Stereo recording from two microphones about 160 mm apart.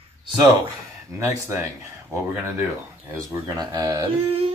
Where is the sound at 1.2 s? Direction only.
15° right (ahead or behind).